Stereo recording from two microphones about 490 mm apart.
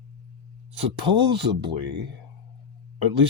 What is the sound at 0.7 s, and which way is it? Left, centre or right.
Speech, right.